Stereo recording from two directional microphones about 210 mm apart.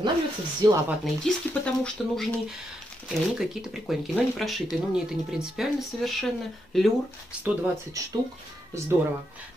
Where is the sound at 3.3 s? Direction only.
Centre (ahead or behind).